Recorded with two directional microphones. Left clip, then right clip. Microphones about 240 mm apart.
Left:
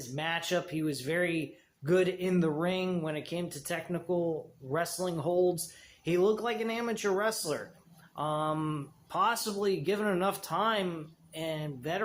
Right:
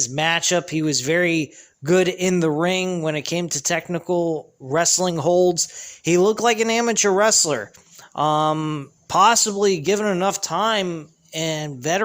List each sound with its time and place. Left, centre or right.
0.2 s a man's voice: right